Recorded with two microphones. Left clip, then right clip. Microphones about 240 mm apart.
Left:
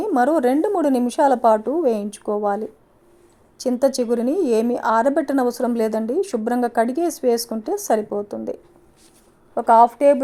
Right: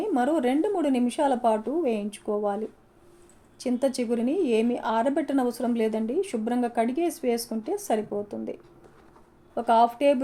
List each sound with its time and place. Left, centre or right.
0.0 s a woman's voice: left
3.6 s a woman's voice: left